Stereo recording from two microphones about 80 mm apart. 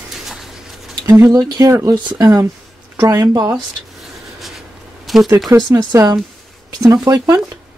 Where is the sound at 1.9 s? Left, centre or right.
Right.